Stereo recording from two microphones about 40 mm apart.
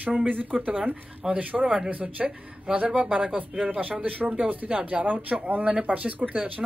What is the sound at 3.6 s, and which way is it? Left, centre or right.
Speech, right.